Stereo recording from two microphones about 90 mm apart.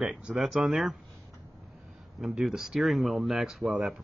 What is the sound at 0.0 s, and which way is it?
Speech, 10° right (ahead or behind).